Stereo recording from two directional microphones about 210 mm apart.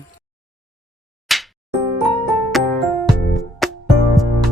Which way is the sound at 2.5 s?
Centre (ahead or behind).